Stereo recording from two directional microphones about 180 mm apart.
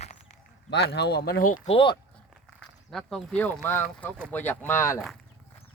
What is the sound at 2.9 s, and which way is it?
Speech, 5° left (ahead or behind).